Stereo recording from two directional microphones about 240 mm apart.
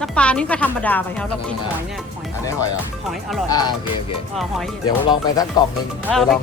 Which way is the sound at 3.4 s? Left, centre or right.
Centre.